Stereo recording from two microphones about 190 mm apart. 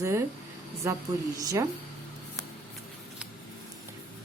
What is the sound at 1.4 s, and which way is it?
Speech, 15° right (ahead or behind).